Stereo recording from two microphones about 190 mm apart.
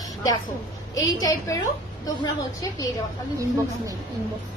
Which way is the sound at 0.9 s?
15° left (ahead or behind).